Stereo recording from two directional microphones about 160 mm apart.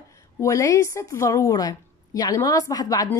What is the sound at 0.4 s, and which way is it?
A woman's voice, 20° left (ahead or behind).